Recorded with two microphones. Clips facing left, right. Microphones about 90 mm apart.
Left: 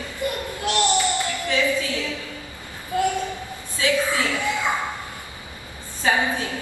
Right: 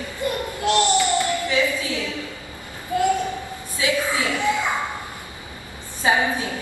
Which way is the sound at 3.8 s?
20° right (ahead or behind).